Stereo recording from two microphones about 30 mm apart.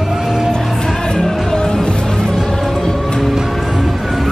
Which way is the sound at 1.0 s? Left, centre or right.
Centre.